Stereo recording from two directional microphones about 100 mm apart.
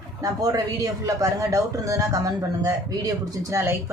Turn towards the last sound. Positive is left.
turn(degrees=-35)  # may be behind; listen again after turning